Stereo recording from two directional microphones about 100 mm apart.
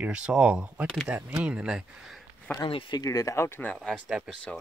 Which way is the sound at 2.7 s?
55° left (ahead or behind).